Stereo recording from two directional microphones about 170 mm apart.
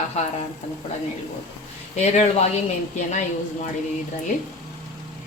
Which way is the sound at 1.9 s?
40° left (ahead or behind).